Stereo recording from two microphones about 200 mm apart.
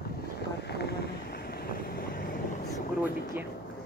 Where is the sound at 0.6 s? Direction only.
55° left (ahead or behind).